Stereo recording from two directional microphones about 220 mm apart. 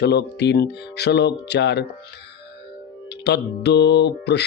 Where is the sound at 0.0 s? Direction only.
50° left (ahead or behind).